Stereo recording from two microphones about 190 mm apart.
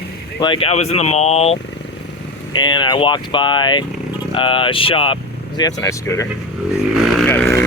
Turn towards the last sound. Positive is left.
turn(degrees=10)  # may be behind; listen again after turning